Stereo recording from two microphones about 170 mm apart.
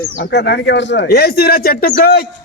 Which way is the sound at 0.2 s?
75° left (ahead or behind).